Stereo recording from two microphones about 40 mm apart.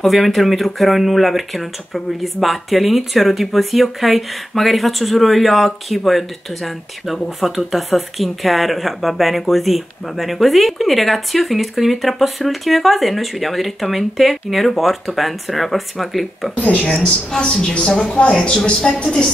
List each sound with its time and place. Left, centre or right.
0.0 s speech: centre
16.5 s speech: left
17.0 s a woman's voice: left
18.3 s a woman's voice: centre